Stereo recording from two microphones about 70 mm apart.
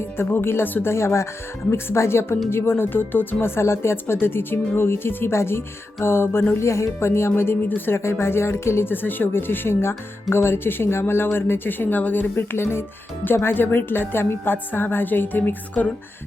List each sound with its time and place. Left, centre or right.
0.2 s speech: left